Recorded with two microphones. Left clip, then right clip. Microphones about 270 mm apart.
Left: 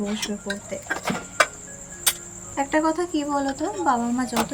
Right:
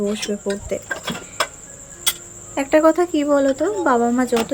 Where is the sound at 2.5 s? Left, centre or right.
Centre.